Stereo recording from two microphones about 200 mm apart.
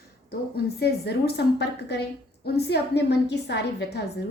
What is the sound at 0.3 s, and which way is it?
A woman's voice, 55° left (ahead or behind).